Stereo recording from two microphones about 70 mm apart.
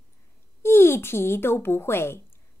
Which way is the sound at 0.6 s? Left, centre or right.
Left.